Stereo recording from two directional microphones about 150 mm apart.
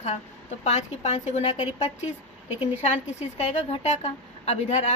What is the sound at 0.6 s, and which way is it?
A woman's voice, 50° left (ahead or behind).